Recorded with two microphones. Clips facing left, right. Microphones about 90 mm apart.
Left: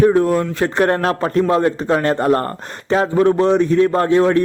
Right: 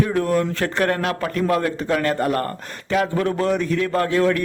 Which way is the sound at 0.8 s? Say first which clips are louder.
Left 5 dB; 35° left (ahead or behind).